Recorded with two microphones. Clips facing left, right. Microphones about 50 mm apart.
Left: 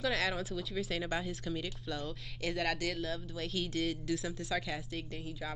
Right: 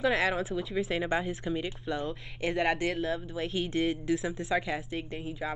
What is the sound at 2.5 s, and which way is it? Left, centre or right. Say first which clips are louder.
Speech: right 7 dB; centre.